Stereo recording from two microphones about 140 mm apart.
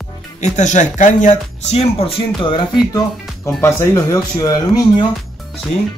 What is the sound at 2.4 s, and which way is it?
Speech, 35° left (ahead or behind).